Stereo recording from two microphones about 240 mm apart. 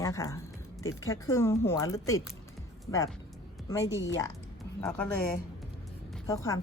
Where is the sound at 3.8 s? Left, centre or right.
Left.